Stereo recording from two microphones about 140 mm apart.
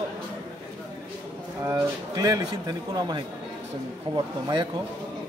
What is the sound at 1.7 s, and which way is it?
A man's voice, 25° right (ahead or behind).